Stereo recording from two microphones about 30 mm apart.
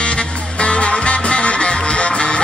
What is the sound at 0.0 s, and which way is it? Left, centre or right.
Music, left.